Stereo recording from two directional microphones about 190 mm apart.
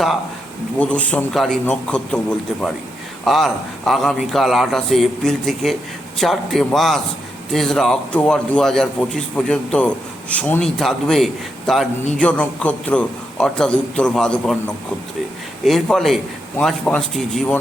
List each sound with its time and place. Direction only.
0.8 s a man's voice: 5° left (ahead or behind)
15.6 s a man's voice: centre (ahead or behind)